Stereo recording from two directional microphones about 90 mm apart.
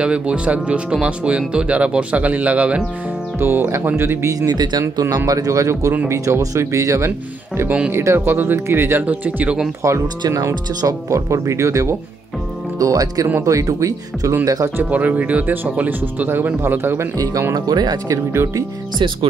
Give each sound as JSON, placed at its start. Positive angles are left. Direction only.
{"t": 0.0, "sound": "speech", "side_deg": -10}
{"t": 3.3, "sound": "speech", "side_deg": -25}
{"t": 4.3, "sound": "speech", "side_deg": -45}
{"t": 9.8, "sound": "speech", "side_deg": -35}
{"t": 14.8, "sound": "speech", "side_deg": -15}
{"t": 17.2, "sound": "speech", "side_deg": -35}